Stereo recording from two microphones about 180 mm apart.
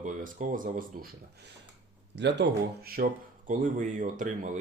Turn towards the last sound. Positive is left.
turn(degrees=-45)  # may be behind; listen again after turning